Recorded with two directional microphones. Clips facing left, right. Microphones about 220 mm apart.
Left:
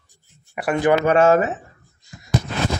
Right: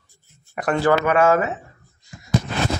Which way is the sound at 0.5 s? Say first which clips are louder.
Left 1 dB; 10° left (ahead or behind).